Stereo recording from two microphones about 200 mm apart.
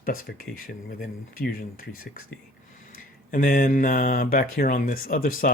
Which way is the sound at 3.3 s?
45° left (ahead or behind).